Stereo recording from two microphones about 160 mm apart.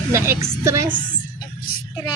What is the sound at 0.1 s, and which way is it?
Speech, 15° right (ahead or behind).